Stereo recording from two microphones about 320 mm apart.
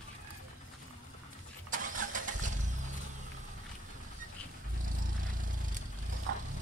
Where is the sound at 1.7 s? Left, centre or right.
Right.